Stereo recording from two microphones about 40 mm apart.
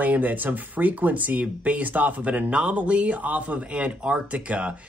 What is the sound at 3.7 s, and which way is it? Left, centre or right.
Speech, right.